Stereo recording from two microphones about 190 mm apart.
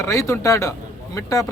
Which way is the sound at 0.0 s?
15° left (ahead or behind).